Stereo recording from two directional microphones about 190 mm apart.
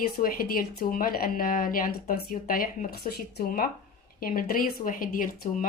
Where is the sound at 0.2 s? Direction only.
50° left (ahead or behind).